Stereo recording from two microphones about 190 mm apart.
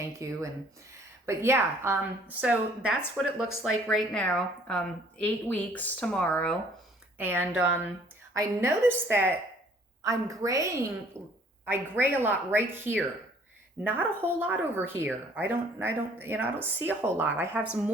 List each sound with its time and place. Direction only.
0.0 s a woman's voice: 15° right (ahead or behind); by 6.6 s 5° left (ahead or behind)
7.2 s a woman's voice: 10° right (ahead or behind)